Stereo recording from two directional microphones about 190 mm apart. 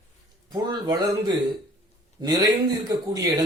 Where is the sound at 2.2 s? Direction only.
20° right (ahead or behind).